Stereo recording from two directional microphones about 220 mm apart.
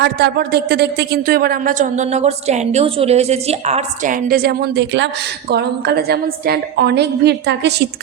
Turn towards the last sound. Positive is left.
turn(degrees=-50)  # may be behind; listen again after turning